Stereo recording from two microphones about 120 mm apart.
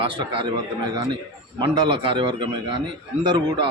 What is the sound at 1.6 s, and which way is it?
A man's voice, 45° right (ahead or behind).